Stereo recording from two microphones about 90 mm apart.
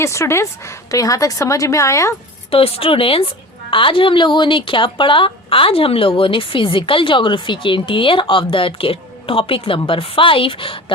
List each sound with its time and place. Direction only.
0.0 s a woman's voice: 30° left (ahead or behind)
2.5 s speech: 90° left
3.7 s speech: 70° left (ahead or behind)